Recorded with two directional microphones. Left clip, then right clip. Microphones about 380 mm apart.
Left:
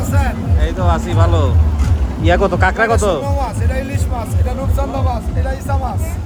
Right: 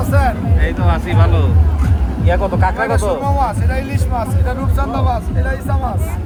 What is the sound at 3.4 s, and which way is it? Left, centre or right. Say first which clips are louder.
Speech: right 3 dB; centre.